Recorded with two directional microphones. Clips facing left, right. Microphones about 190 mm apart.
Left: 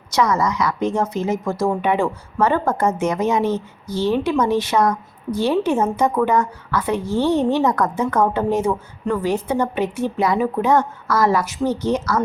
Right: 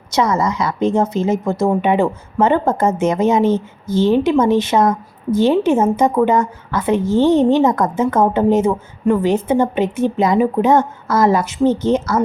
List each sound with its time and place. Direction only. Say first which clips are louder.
0.1 s a woman's voice: right 2 dB; 25° right (ahead or behind)